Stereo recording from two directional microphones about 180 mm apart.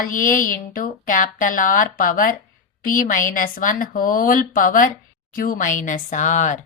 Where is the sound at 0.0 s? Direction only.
50° left (ahead or behind).